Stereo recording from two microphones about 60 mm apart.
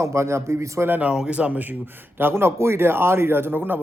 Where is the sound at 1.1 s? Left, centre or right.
Centre.